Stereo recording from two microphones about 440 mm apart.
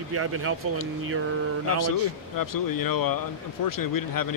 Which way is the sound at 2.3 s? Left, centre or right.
Left.